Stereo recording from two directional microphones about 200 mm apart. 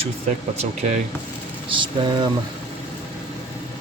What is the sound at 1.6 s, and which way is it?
Vehicle, 25° right (ahead or behind).